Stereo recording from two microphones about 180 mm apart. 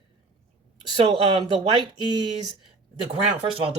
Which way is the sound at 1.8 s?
25° right (ahead or behind).